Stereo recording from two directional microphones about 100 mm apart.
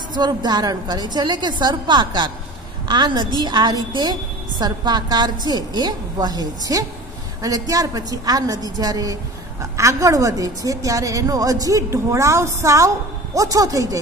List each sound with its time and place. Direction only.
0.1 s a woman's voice: 45° right (ahead or behind)